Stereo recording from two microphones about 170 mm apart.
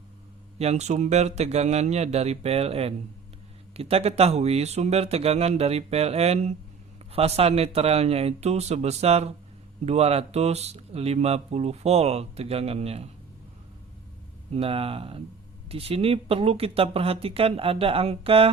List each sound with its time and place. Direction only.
0.6 s speech: 40° right (ahead or behind)
14.5 s speech: 35° right (ahead or behind)